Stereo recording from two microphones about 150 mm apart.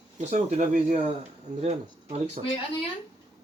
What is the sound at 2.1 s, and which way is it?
Speech, 45° right (ahead or behind).